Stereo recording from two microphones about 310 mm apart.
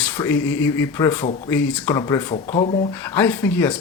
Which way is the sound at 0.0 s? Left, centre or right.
Centre.